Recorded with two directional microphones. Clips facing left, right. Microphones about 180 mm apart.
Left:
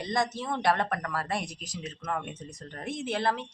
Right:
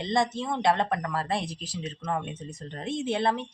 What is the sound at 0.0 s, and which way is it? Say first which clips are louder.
Speech: right 3 dB; 25° right (ahead or behind).